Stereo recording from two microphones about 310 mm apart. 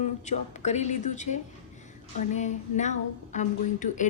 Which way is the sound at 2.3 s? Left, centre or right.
Left.